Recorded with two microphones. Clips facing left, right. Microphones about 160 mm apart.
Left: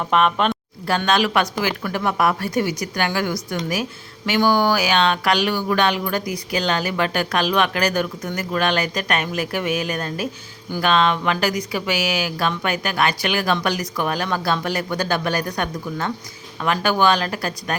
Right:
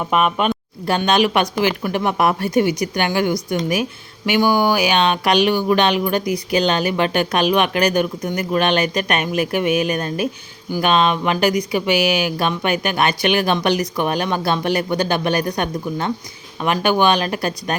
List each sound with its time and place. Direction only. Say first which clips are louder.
0.1 s speech: even; 10° right (ahead or behind)